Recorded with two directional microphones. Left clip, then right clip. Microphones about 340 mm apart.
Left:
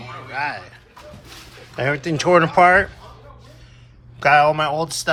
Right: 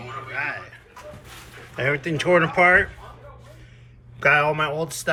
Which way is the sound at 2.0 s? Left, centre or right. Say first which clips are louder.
Left 5 dB; centre.